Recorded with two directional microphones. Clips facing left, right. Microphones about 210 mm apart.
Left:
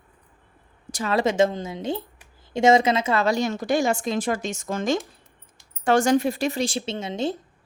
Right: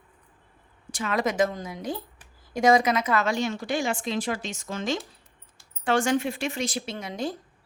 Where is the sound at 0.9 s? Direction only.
35° left (ahead or behind).